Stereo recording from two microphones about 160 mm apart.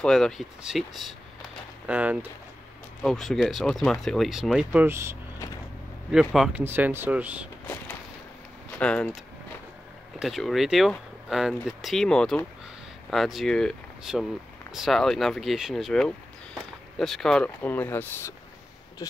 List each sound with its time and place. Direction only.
0.0 s speech: centre (ahead or behind)
3.0 s speech: 5° left (ahead or behind)
4.8 s speech: 15° right (ahead or behind)
6.1 s speech: centre (ahead or behind)
6.6 s speech: 15° right (ahead or behind)
7.6 s a sound: 10° left (ahead or behind)
8.7 s speech: 5° left (ahead or behind)